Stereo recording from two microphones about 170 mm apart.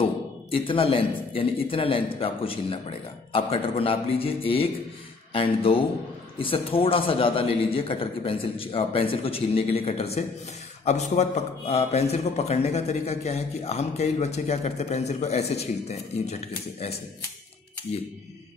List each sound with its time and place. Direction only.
0.0 s a man's voice: 30° left (ahead or behind)